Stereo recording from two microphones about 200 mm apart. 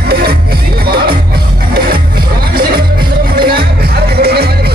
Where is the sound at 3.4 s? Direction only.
50° right (ahead or behind).